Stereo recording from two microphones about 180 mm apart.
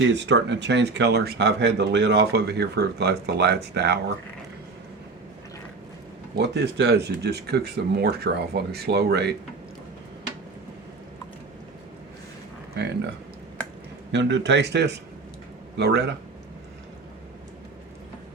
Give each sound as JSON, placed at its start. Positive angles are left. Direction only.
{"t": 0.0, "sound": "speech", "side_deg": -85}
{"t": 6.3, "sound": "speech", "side_deg": -70}
{"t": 12.7, "sound": "speech", "side_deg": -65}
{"t": 14.1, "sound": "speech", "side_deg": -85}